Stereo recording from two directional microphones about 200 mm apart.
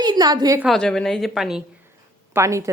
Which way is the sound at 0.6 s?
Centre (ahead or behind).